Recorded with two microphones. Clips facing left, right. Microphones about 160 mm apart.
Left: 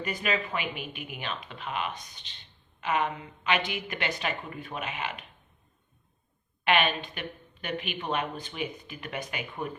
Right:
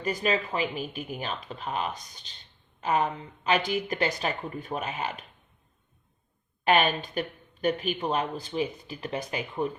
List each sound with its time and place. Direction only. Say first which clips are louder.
0.0 s speech: right 3 dB; 35° right (ahead or behind)
6.7 s speech: right 2 dB; 40° right (ahead or behind)